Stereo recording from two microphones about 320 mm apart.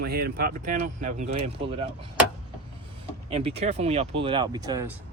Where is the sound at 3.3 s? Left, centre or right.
Centre.